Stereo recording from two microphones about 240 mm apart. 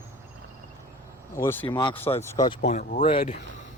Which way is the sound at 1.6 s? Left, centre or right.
Centre.